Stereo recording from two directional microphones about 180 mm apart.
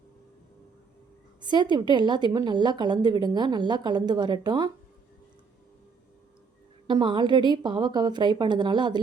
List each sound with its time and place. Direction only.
1.4 s a woman's voice: 25° right (ahead or behind)
6.8 s a woman's voice: 25° right (ahead or behind)